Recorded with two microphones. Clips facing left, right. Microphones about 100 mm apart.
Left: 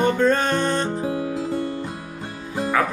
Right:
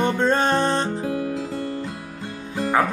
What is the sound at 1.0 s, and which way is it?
Music, 20° left (ahead or behind).